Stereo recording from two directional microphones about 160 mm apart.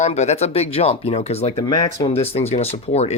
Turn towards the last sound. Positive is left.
turn(degrees=40)  # may be behind; listen again after turning